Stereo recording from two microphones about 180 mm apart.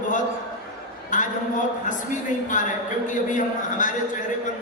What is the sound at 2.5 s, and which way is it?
Speech, 45° left (ahead or behind).